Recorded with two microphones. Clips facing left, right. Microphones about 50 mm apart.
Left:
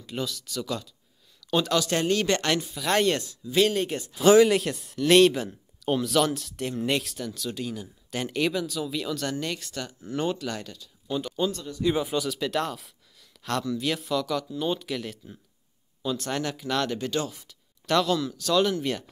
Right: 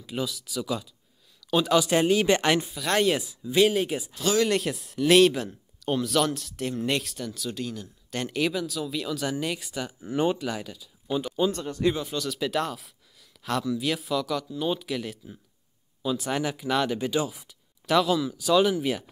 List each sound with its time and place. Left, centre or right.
0.0 s speech: centre
2.7 s speech: centre
11.5 s speech: right
11.9 s speech: centre
12.3 s speech: centre